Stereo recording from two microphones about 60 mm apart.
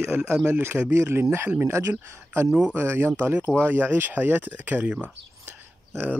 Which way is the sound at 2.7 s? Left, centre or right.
Right.